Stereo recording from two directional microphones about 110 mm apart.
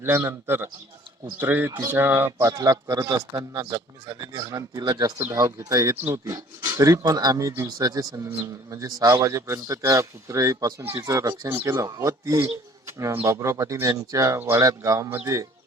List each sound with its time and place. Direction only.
0.0 s speech: 20° right (ahead or behind)